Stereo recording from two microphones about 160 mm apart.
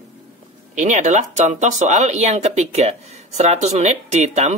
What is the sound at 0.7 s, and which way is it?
Speech, 50° right (ahead or behind).